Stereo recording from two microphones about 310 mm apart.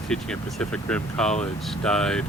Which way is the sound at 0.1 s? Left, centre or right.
Centre.